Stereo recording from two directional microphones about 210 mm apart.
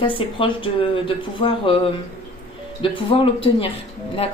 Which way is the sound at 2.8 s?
25° left (ahead or behind).